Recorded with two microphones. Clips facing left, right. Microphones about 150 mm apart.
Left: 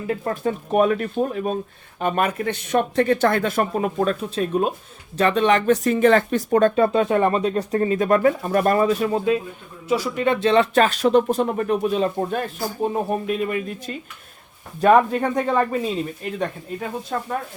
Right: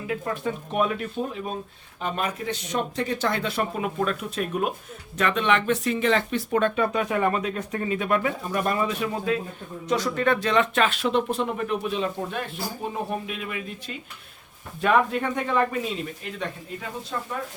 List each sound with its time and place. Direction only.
0.3 s speech: 45° left (ahead or behind)
9.9 s speech: 10° left (ahead or behind)
10.2 s speech: 30° left (ahead or behind)
17.1 s speech: 55° left (ahead or behind)